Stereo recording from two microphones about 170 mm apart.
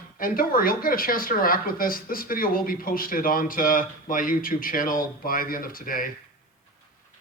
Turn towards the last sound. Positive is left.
turn(degrees=55)  # may be behind; listen again after turning